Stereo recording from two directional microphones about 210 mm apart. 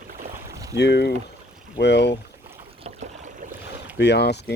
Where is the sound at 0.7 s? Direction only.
55° left (ahead or behind).